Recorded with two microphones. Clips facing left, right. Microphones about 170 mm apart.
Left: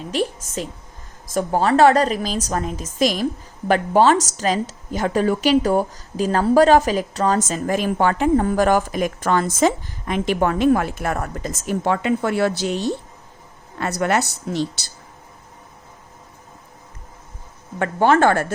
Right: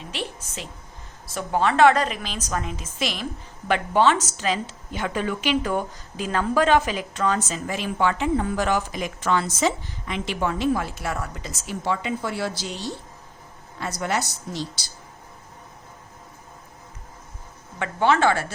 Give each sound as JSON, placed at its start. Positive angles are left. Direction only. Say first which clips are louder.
{"t": 0.1, "sound": "a woman's voice", "louder": "left 11 dB", "side_deg": 40}
{"t": 17.7, "sound": "a woman's voice", "louder": "left 5 dB", "side_deg": 45}